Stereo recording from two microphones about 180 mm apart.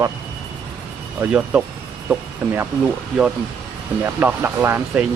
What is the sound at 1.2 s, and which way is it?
Speech, 10° right (ahead or behind).